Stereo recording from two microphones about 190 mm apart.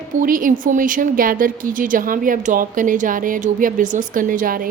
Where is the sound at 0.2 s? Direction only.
45° right (ahead or behind).